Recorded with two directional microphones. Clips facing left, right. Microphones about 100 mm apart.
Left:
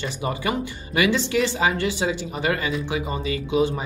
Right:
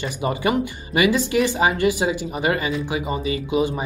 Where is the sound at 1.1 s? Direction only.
10° right (ahead or behind).